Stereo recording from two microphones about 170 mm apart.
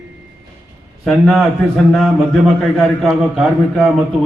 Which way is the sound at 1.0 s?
Centre (ahead or behind).